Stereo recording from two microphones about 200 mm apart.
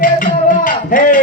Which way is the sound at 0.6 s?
40° left (ahead or behind).